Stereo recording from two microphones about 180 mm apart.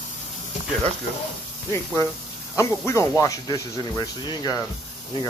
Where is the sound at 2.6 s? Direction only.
15° left (ahead or behind).